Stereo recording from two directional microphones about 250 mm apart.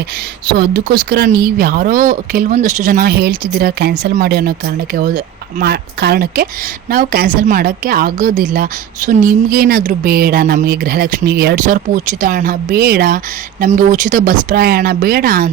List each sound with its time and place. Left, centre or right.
0.5 s a woman's voice: right